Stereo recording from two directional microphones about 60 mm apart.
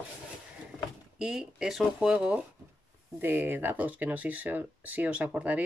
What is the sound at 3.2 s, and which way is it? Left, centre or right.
Speech, right.